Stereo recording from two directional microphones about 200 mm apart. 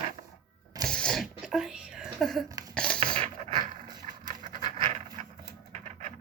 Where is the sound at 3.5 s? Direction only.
20° right (ahead or behind).